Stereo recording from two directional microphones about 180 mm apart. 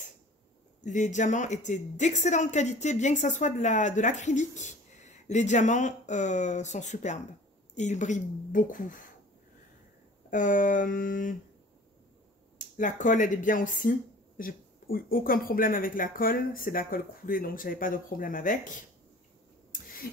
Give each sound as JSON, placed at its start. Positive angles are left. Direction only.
{"t": 0.8, "sound": "speech", "side_deg": 45}
{"t": 10.3, "sound": "speech", "side_deg": 45}
{"t": 12.5, "sound": "speech", "side_deg": 45}